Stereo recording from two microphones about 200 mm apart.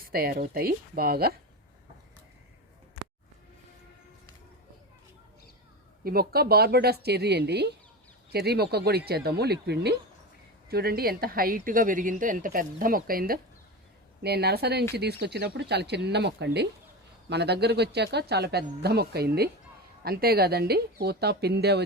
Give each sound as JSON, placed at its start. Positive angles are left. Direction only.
{"t": 0.0, "sound": "a woman's voice", "side_deg": -50}
{"t": 6.1, "sound": "a woman's voice", "side_deg": -50}